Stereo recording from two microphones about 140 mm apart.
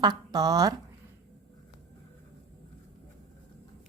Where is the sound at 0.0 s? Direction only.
30° right (ahead or behind).